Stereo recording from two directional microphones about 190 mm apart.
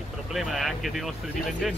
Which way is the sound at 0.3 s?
Centre (ahead or behind).